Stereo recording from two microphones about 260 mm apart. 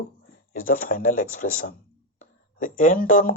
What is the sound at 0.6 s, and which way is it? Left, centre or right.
A man's voice, left.